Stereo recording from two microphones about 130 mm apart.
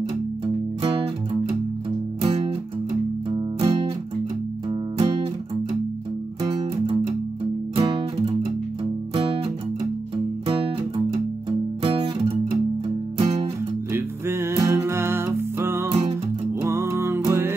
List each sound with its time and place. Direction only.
2.2 s music: 50° right (ahead or behind)
3.5 s music: 50° right (ahead or behind)
4.9 s music: 50° right (ahead or behind)
7.7 s music: 45° right (ahead or behind)
11.8 s guitar: 45° right (ahead or behind)
13.2 s music: 50° right (ahead or behind)
13.9 s music: 20° right (ahead or behind)